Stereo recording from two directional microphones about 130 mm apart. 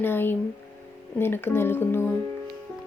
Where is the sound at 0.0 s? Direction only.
15° left (ahead or behind).